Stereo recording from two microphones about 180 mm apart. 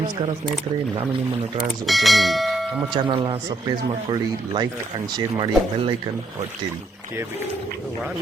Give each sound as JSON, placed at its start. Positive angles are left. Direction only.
{"t": 1.9, "sound": "bell", "side_deg": 0}
{"t": 2.9, "sound": "speech", "side_deg": -25}